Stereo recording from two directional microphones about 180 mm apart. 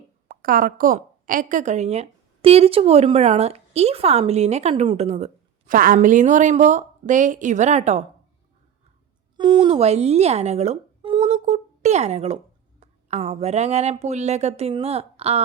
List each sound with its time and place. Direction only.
0.3 s a woman's voice: 50° right (ahead or behind)
9.4 s a woman's voice: 25° right (ahead or behind)